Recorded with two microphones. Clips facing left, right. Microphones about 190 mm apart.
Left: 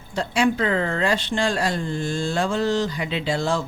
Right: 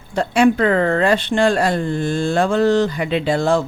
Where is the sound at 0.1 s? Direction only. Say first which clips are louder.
Right 6 dB; 55° right (ahead or behind).